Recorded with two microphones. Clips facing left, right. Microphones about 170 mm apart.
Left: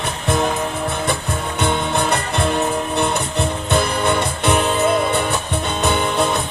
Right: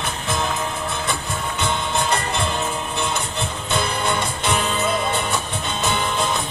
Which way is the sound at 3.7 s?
60° left (ahead or behind).